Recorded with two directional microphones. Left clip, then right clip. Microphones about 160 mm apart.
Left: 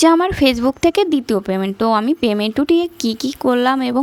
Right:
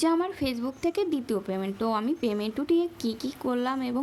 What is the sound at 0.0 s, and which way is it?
Speech, 40° left (ahead or behind).